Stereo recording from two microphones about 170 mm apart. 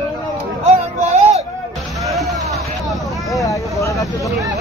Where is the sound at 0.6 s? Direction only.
40° right (ahead or behind).